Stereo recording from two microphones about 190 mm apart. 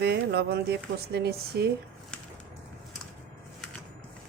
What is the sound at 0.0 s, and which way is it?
Speech, 60° right (ahead or behind).